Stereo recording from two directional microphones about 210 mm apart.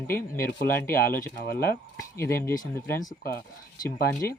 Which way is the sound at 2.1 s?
10° left (ahead or behind).